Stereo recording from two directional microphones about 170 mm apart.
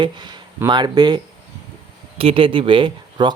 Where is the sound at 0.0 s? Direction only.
25° right (ahead or behind).